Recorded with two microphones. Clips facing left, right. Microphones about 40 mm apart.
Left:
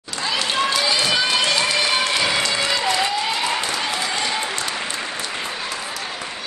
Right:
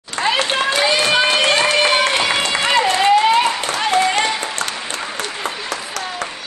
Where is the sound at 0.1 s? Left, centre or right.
Right.